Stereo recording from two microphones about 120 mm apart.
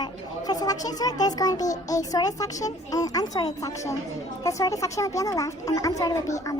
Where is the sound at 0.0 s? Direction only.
35° left (ahead or behind).